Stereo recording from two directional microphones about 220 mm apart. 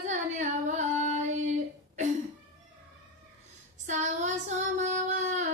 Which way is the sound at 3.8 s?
35° right (ahead or behind).